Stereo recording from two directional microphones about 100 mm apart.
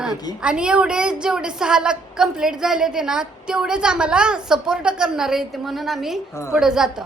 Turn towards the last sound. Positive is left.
turn(degrees=-5)  # may be behind; listen again after turning